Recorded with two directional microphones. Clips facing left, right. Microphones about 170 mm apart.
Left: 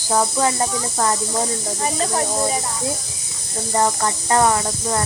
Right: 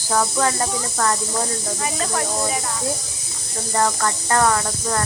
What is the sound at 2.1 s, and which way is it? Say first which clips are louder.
Speech: left 2 dB; 25° left (ahead or behind).